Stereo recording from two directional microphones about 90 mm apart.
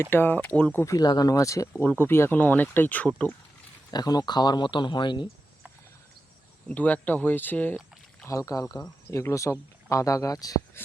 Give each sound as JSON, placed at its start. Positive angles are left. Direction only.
{"t": 0.0, "sound": "speech", "side_deg": 25}
{"t": 0.9, "sound": "speech", "side_deg": 45}
{"t": 1.8, "sound": "speech", "side_deg": 25}
{"t": 3.9, "sound": "speech", "side_deg": 45}
{"t": 6.7, "sound": "speech", "side_deg": 15}
{"t": 8.3, "sound": "speech", "side_deg": 40}
{"t": 10.8, "sound": "speech", "side_deg": 25}